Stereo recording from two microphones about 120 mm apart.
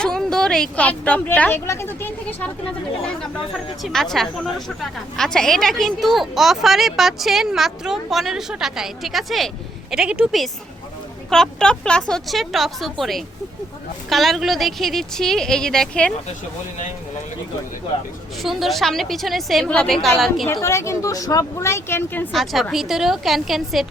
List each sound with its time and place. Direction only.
0.0 s speech: 5° left (ahead or behind)
3.8 s a woman's voice: 5° left (ahead or behind)
11.3 s a woman's voice: 5° left (ahead or behind)
18.4 s a woman's voice: centre (ahead or behind)
20.5 s speech: 25° left (ahead or behind)
22.3 s a woman's voice: centre (ahead or behind)